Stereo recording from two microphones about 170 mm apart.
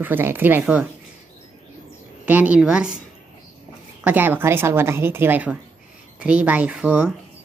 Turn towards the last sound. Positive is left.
turn(degrees=-5)  # may be behind; listen again after turning